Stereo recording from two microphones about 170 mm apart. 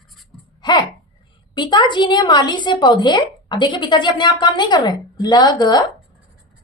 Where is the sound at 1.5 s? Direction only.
25° left (ahead or behind).